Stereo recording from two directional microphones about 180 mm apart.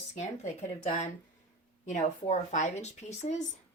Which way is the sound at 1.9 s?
40° left (ahead or behind).